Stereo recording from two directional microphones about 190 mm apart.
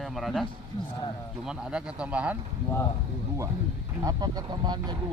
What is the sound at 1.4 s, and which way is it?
Speech, 5° right (ahead or behind).